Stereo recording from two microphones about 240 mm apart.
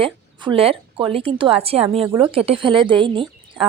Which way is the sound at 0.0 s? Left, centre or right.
Right.